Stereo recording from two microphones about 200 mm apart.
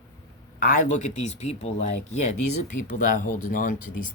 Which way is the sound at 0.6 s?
40° left (ahead or behind).